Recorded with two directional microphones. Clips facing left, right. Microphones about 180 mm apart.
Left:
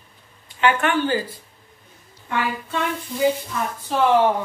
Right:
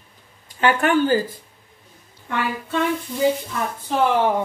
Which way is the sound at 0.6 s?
40° right (ahead or behind).